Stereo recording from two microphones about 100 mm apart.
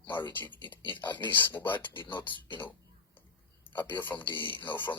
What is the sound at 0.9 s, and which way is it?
A man's voice, 50° left (ahead or behind).